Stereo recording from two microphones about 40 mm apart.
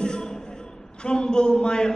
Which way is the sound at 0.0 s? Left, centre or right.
Centre.